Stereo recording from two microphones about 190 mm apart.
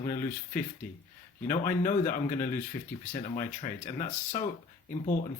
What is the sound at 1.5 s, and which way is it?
Speech, 45° left (ahead or behind).